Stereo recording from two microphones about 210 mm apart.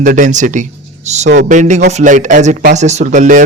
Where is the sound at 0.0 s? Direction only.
35° right (ahead or behind).